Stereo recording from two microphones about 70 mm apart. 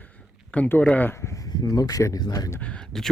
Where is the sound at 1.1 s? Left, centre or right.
Left.